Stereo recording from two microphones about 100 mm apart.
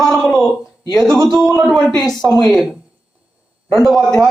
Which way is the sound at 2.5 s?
Centre (ahead or behind).